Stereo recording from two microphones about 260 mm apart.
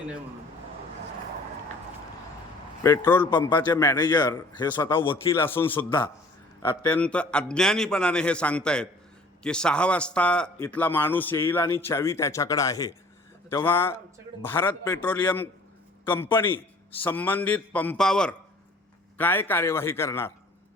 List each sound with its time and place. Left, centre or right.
2.8 s a man's voice: centre